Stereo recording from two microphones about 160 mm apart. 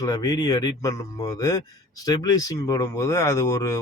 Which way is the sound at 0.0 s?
25° left (ahead or behind).